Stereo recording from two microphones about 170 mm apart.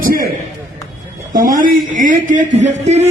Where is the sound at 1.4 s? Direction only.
55° right (ahead or behind).